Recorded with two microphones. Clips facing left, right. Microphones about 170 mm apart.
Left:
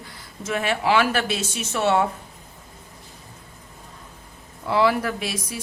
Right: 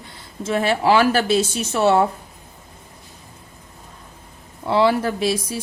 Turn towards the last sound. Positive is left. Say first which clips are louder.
# right 7 dB
turn(degrees=-30)  # may be behind; listen again after turning